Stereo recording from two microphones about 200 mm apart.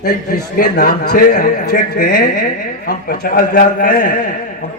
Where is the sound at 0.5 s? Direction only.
45° left (ahead or behind).